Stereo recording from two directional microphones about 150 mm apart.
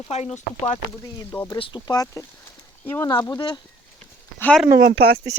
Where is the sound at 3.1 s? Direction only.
25° left (ahead or behind).